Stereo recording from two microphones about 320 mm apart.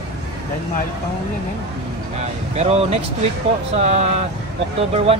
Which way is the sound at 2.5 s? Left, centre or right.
Centre.